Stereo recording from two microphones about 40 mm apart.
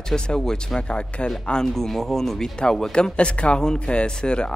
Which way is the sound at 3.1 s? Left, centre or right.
Left.